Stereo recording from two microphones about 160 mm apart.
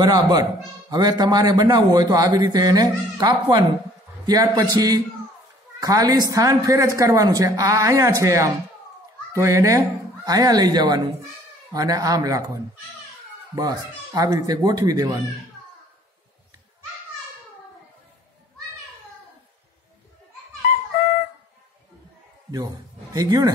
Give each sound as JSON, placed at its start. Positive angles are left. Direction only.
{"t": 0.0, "sound": "a man's voice", "side_deg": -25}
{"t": 13.6, "sound": "a man's voice", "side_deg": -25}
{"t": 23.1, "sound": "a man's voice", "side_deg": -25}